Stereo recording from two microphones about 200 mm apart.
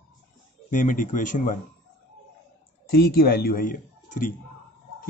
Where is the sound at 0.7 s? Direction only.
40° left (ahead or behind).